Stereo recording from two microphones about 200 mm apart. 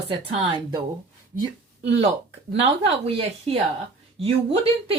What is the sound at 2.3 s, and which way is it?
A woman's voice, 30° right (ahead or behind).